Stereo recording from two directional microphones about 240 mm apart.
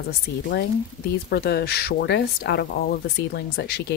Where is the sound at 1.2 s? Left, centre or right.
Left.